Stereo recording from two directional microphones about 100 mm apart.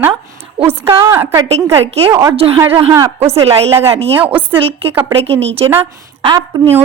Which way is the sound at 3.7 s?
30° right (ahead or behind).